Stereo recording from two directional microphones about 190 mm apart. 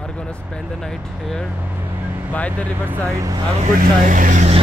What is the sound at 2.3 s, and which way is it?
Speech, 10° left (ahead or behind).